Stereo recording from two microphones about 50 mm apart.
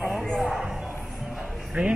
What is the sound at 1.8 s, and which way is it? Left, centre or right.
Speech, right.